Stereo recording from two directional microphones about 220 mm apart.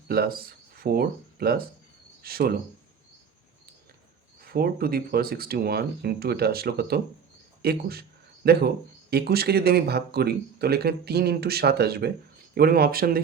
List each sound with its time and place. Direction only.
0.1 s speech: 45° right (ahead or behind)
4.4 s speech: 45° right (ahead or behind)